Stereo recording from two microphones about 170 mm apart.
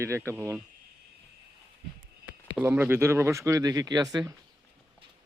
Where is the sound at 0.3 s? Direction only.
15° right (ahead or behind).